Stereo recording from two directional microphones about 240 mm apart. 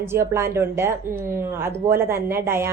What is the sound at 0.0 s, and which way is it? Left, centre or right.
Speech, centre.